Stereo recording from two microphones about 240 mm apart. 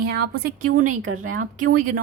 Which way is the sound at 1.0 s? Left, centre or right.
Right.